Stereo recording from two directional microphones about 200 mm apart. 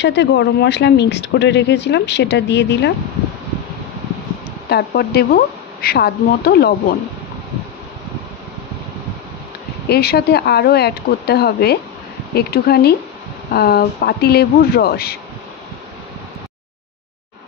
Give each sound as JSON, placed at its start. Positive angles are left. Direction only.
{"t": 0.0, "sound": "speech", "side_deg": 60}
{"t": 4.6, "sound": "speech", "side_deg": 55}
{"t": 9.8, "sound": "speech", "side_deg": 55}